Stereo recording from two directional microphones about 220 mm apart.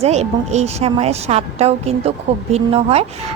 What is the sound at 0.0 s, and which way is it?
A woman's voice, 30° right (ahead or behind).